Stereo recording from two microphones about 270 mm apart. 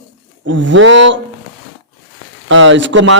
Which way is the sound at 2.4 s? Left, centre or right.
Right.